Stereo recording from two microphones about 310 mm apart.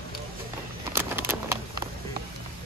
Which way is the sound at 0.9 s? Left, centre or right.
Centre.